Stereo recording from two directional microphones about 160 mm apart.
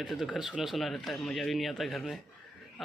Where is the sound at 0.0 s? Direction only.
Centre (ahead or behind).